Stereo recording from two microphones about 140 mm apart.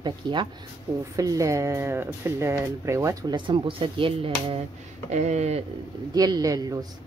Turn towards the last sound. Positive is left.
turn(degrees=-25)  # may be behind; listen again after turning